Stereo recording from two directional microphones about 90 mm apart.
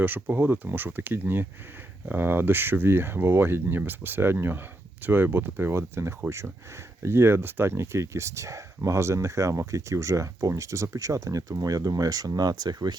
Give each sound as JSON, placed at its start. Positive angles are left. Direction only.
{"t": 0.0, "sound": "speech", "side_deg": -20}